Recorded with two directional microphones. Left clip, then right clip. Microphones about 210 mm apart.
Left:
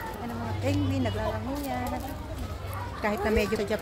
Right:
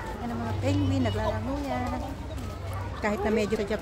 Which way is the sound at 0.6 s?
10° right (ahead or behind).